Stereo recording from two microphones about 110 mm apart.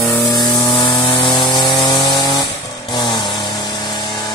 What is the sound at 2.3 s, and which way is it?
Vehicle, 35° left (ahead or behind).